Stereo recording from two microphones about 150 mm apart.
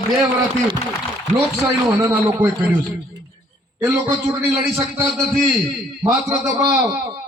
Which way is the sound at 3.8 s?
20° right (ahead or behind).